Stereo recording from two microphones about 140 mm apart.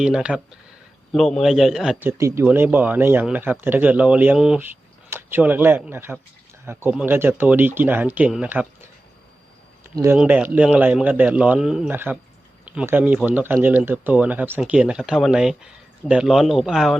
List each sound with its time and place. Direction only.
0.0 s speech: 5° right (ahead or behind)
2.0 s a man's voice: 20° right (ahead or behind)
9.9 s speech: 20° right (ahead or behind)
10.2 s a man's voice: 10° right (ahead or behind)